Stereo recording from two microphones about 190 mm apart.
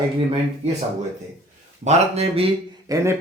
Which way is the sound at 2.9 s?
20° right (ahead or behind).